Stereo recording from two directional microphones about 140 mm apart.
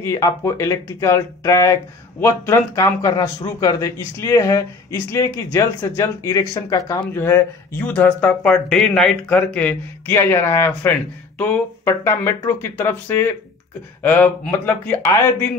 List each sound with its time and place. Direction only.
0.0 s speech: 20° left (ahead or behind)
7.2 s speech: 15° left (ahead or behind)